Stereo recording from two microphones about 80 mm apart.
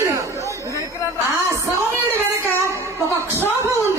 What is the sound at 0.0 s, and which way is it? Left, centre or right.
Chatter, right.